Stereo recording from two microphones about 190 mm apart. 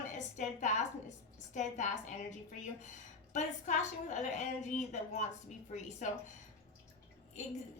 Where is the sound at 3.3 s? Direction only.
40° left (ahead or behind).